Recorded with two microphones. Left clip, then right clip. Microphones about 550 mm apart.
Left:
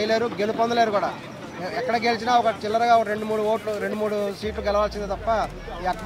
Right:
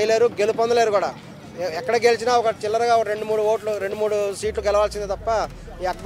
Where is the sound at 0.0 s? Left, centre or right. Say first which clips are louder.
Right 5 dB; right.